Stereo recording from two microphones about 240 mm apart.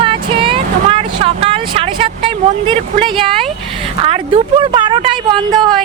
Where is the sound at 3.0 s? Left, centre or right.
Right.